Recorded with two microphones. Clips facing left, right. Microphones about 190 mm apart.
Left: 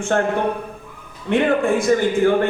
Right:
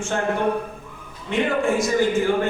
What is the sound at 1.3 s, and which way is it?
Speech, 60° left (ahead or behind).